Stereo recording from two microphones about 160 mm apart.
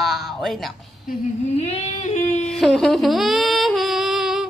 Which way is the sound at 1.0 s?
45° left (ahead or behind).